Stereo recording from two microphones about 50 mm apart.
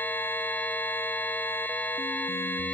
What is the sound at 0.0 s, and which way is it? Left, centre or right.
Music, left.